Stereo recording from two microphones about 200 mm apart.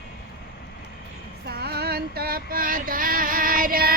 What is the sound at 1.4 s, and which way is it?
Female singing, 50° right (ahead or behind).